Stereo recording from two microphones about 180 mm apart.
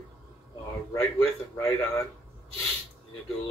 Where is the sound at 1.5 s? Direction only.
20° left (ahead or behind).